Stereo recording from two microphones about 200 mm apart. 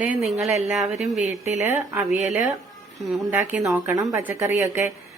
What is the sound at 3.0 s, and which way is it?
Speech, centre (ahead or behind).